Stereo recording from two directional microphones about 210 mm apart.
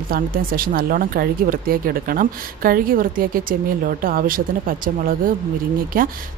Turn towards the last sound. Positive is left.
turn(degrees=-45)  # may be behind; listen again after turning